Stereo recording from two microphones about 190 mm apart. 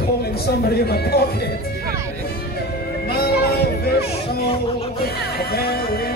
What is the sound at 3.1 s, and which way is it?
Music, 55° left (ahead or behind).